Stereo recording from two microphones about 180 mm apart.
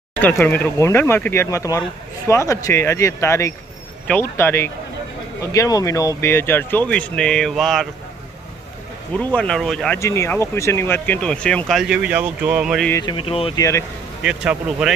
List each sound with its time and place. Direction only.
0.1 s speech: 10° left (ahead or behind)
9.1 s speech: 10° left (ahead or behind)
10.0 s speech: 15° left (ahead or behind); by 12.9 s centre (ahead or behind)
12.9 s speech: 25° left (ahead or behind)
13.6 s speech: 15° left (ahead or behind)
14.2 s speech: 5° right (ahead or behind)